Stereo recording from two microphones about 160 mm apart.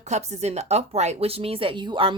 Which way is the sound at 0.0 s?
45° right (ahead or behind).